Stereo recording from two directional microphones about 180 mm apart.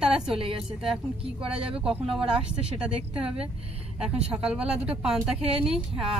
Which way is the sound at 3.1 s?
30° right (ahead or behind).